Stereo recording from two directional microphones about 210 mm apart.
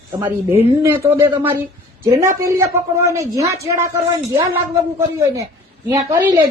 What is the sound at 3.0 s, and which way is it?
Speech, 15° right (ahead or behind).